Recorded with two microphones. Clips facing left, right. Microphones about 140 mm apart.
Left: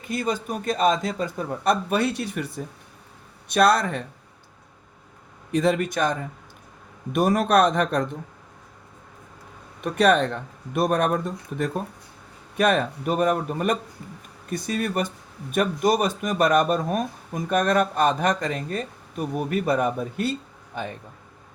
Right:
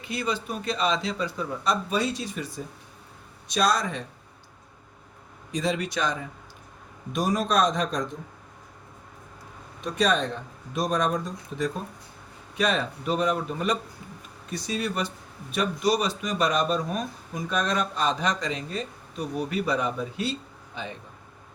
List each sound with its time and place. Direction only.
0.0 s speech: 45° left (ahead or behind)
5.5 s speech: 60° left (ahead or behind)
9.8 s speech: 60° left (ahead or behind)